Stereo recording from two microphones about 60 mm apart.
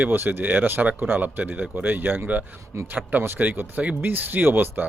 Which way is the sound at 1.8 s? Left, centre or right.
Right.